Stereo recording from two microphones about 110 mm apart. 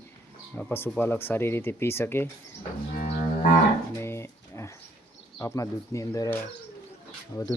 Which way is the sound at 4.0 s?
25° left (ahead or behind).